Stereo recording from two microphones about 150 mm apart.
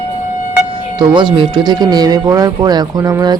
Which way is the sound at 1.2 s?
35° right (ahead or behind).